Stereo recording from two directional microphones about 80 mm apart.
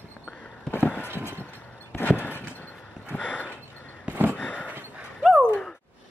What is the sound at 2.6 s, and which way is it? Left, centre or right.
Horse, left.